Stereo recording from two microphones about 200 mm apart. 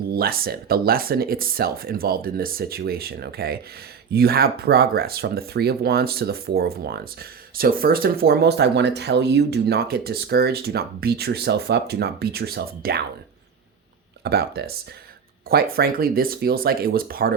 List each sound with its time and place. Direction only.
0.1 s speech: 50° right (ahead or behind)
14.3 s speech: 55° right (ahead or behind)